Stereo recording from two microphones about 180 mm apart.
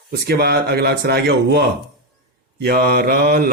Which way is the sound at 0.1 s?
60° right (ahead or behind).